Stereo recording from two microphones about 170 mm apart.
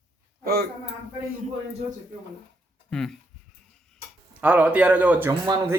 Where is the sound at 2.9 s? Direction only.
Centre (ahead or behind).